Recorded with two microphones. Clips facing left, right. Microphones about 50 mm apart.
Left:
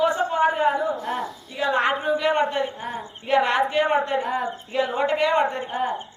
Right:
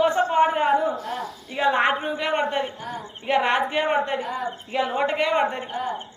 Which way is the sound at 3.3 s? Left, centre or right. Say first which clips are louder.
Left 1 dB; right.